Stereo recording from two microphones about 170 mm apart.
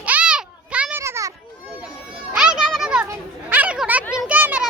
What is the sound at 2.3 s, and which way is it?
Children playing, 5° right (ahead or behind).